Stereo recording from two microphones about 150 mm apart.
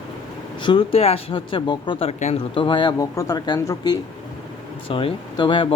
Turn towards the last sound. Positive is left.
turn(degrees=35)  # may be behind; listen again after turning